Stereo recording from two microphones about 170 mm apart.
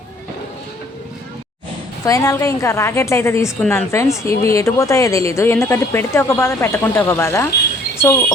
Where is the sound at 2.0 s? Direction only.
20° left (ahead or behind).